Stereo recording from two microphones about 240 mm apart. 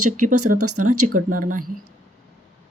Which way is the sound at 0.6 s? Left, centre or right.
Right.